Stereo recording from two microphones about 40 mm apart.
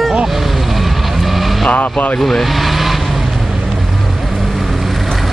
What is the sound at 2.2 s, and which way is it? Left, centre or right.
Speech, centre.